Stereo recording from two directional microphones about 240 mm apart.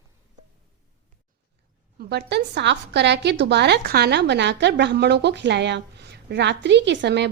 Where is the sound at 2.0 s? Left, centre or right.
Right.